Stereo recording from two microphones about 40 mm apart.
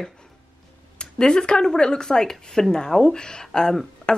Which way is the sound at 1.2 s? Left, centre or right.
Left.